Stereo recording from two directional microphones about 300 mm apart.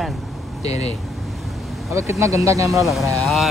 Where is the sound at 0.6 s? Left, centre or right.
Left.